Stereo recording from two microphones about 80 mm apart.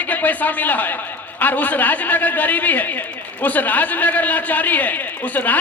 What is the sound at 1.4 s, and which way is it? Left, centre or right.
A man's voice, left.